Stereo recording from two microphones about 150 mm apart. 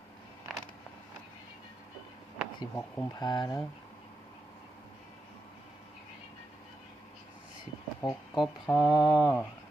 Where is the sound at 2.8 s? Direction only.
15° left (ahead or behind).